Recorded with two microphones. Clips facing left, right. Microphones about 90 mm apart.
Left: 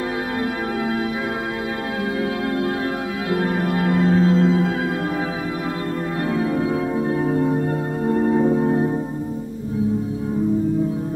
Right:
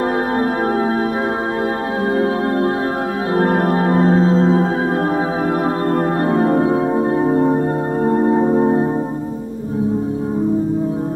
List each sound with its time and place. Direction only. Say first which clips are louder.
3.3 s music: right 7 dB; 45° right (ahead or behind)
6.2 s music: right 5 dB; 40° right (ahead or behind)